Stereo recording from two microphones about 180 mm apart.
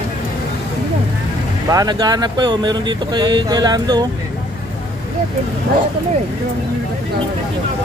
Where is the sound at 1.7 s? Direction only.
20° right (ahead or behind).